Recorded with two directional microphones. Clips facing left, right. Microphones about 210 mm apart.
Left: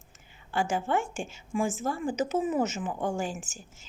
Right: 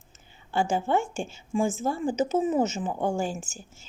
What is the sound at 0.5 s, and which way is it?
A woman's voice, 25° right (ahead or behind).